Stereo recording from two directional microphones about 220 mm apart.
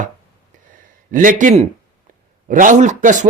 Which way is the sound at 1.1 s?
35° right (ahead or behind).